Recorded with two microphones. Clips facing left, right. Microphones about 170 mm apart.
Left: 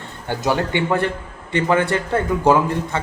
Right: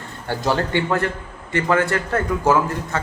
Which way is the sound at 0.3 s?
15° left (ahead or behind).